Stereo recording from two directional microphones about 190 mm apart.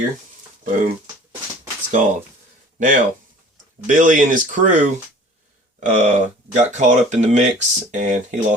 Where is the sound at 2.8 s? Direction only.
45° right (ahead or behind).